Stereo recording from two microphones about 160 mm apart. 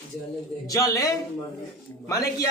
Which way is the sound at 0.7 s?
20° left (ahead or behind).